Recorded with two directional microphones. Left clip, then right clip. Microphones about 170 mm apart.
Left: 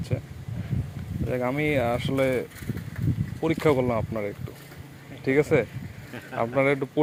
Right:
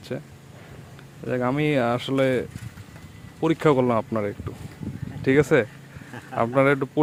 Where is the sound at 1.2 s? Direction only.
40° right (ahead or behind).